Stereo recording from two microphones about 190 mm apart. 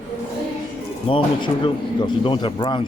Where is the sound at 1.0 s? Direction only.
25° left (ahead or behind).